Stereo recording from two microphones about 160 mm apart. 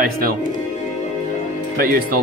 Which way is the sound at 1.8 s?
65° right (ahead or behind).